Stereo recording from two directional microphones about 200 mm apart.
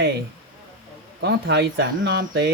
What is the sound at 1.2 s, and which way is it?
Speech, 60° right (ahead or behind).